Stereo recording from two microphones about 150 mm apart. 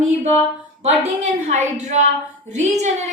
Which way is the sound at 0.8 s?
50° right (ahead or behind).